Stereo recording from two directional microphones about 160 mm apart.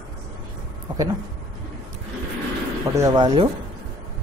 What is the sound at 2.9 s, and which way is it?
Speech, 25° right (ahead or behind).